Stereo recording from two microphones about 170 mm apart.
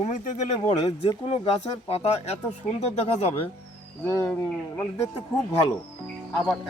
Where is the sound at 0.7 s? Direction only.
30° left (ahead or behind).